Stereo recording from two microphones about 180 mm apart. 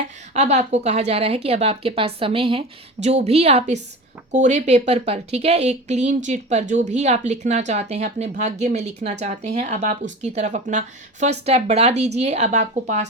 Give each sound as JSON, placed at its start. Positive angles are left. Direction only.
{"t": 0.3, "sound": "speech", "side_deg": -40}